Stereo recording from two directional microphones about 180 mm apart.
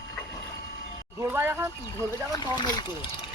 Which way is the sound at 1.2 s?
10° right (ahead or behind).